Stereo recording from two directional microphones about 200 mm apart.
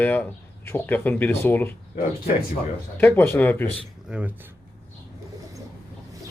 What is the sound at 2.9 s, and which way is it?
Speech, 10° left (ahead or behind).